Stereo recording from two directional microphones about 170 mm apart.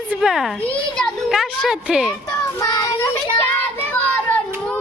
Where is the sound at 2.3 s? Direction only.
15° left (ahead or behind).